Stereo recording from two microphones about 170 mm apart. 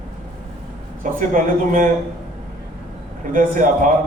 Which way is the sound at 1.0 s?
50° right (ahead or behind).